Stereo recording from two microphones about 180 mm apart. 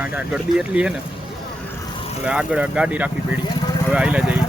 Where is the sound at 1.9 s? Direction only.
30° left (ahead or behind).